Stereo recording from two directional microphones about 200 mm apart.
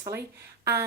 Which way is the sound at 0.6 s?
15° right (ahead or behind).